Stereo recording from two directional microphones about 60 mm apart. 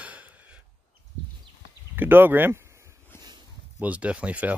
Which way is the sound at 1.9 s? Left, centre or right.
Right.